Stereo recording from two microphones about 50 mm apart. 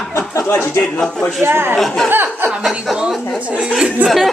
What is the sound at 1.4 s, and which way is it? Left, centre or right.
Speech, right.